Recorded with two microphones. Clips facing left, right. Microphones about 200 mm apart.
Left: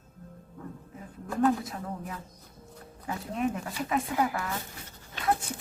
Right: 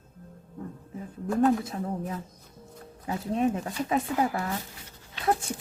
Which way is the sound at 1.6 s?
30° right (ahead or behind).